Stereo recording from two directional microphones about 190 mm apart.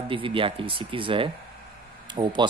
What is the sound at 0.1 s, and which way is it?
Speech, 25° right (ahead or behind).